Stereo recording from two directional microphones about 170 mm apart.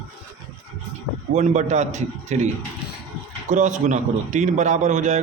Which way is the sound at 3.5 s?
45° right (ahead or behind).